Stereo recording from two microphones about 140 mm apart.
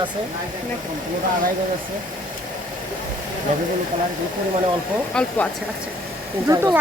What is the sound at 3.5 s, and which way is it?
Speech, 60° right (ahead or behind).